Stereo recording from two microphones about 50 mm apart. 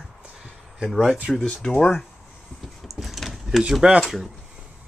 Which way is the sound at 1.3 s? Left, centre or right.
Centre.